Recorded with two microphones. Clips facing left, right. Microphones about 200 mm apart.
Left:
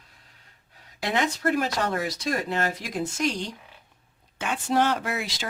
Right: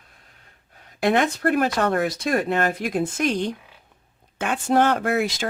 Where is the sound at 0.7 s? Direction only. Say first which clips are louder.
Right 7 dB; 55° right (ahead or behind).